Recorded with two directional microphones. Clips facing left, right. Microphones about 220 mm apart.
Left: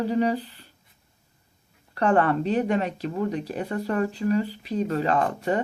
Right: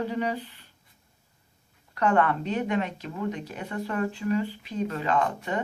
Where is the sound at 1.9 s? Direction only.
35° left (ahead or behind).